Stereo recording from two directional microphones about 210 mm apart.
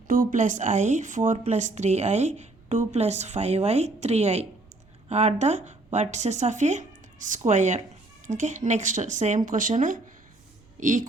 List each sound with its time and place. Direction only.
0.1 s a woman's voice: 40° right (ahead or behind)